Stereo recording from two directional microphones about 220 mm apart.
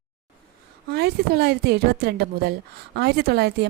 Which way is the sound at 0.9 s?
45° right (ahead or behind).